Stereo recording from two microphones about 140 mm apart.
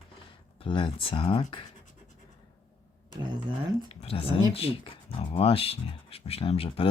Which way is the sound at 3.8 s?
40° left (ahead or behind).